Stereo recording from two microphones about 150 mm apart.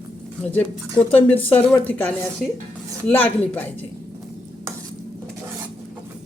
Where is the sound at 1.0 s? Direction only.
30° left (ahead or behind).